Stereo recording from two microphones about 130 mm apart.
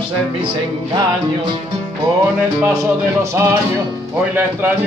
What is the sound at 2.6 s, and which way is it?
Speech, 25° right (ahead or behind).